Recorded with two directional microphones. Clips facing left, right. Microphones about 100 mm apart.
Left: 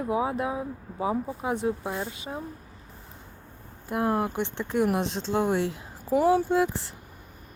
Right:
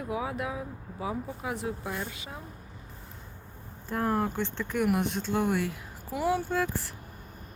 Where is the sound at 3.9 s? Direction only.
15° left (ahead or behind).